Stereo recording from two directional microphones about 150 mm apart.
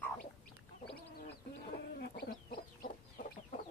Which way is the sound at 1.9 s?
90° left.